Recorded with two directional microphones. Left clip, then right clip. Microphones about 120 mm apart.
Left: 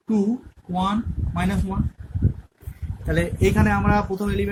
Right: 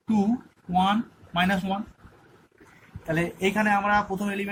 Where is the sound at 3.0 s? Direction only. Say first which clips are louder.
Left 4 dB; 35° left (ahead or behind).